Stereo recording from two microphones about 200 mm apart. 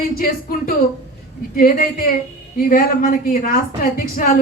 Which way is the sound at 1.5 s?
45° left (ahead or behind).